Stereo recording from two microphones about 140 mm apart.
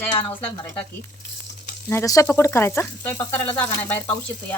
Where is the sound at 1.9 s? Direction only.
20° left (ahead or behind).